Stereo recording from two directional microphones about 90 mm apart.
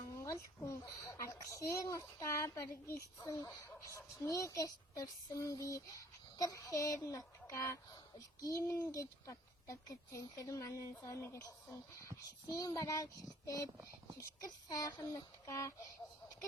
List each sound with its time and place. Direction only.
0.0 s speech: 35° left (ahead or behind)
14.7 s speech: 40° left (ahead or behind)